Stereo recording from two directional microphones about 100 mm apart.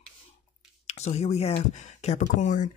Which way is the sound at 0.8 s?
90° left.